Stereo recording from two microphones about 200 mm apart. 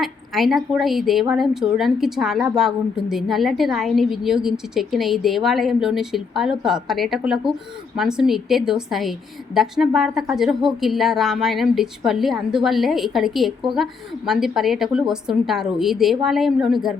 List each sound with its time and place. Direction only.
0.0 s a woman's voice: centre (ahead or behind)